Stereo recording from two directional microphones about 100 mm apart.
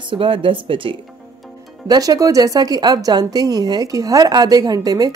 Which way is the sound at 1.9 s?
40° right (ahead or behind).